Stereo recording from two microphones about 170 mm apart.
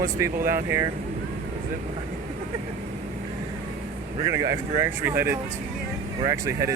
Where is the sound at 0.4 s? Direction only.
15° right (ahead or behind).